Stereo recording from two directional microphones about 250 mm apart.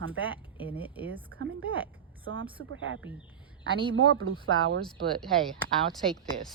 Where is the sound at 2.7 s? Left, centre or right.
Right.